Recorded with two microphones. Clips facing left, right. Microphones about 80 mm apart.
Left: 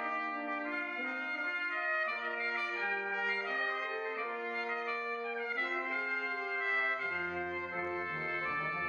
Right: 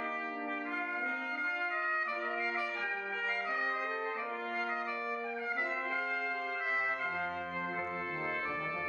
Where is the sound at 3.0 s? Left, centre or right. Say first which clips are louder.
Left 2 dB; centre.